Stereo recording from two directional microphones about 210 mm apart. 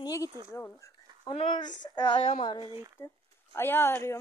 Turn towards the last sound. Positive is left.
turn(degrees=10)  # may be behind; listen again after turning